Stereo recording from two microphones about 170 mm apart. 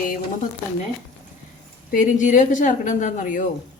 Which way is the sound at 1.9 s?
50° left (ahead or behind).